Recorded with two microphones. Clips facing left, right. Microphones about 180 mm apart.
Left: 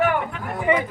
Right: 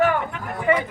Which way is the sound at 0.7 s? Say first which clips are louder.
Even; 20° left (ahead or behind).